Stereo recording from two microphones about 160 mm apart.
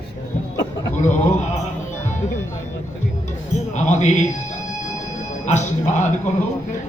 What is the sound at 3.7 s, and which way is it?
Speech, 50° left (ahead or behind).